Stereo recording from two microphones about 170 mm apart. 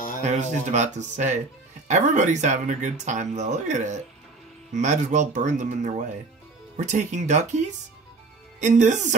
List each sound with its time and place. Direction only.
0.3 s speech: 45° right (ahead or behind)
8.5 s speech: 45° right (ahead or behind)